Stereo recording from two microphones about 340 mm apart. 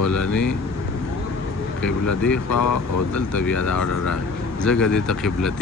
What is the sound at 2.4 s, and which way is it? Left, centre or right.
Speech, left.